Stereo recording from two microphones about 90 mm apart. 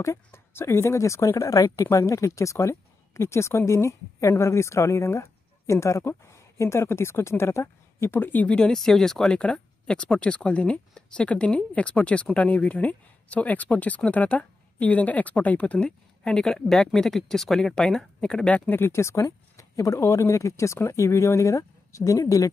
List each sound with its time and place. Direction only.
0.0 s speech: 30° left (ahead or behind); by 18.8 s 10° left (ahead or behind)
18.8 s speech: 30° left (ahead or behind)